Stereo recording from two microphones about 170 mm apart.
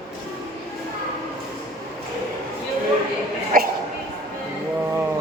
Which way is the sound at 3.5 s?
55° right (ahead or behind).